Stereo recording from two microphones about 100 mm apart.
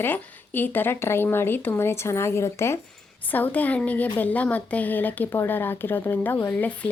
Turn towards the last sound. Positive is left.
turn(degrees=15)  # may be behind; listen again after turning